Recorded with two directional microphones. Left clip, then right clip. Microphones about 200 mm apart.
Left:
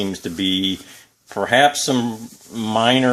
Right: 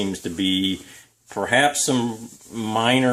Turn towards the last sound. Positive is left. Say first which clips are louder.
# left 3 dB
turn(degrees=35)  # may be behind; listen again after turning